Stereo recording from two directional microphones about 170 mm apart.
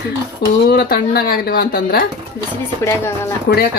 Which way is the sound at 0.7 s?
65° left (ahead or behind).